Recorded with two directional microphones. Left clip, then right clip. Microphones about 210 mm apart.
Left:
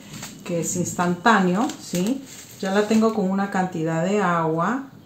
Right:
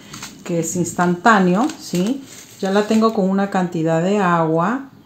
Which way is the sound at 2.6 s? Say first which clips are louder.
Right 4 dB; 50° right (ahead or behind).